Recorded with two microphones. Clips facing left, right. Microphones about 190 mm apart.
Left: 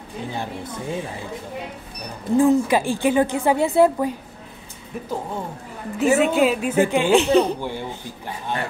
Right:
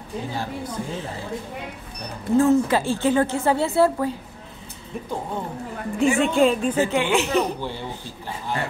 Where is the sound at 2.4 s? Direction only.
15° left (ahead or behind).